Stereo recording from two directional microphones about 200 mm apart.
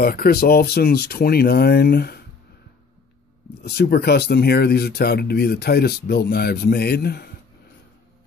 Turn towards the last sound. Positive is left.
turn(degrees=55)  # may be behind; listen again after turning